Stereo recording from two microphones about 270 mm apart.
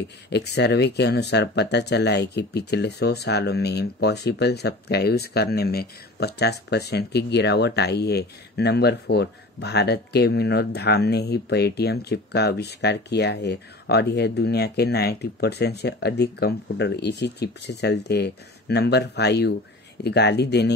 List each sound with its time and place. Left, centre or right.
0.3 s speech: left